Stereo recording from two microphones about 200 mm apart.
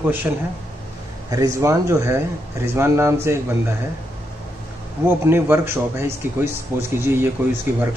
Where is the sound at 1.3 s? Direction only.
15° right (ahead or behind).